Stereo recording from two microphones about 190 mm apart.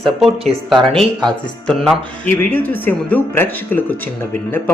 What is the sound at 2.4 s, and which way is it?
Speech, 10° left (ahead or behind).